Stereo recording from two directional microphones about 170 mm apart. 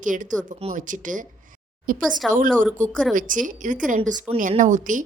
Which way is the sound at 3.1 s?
50° right (ahead or behind).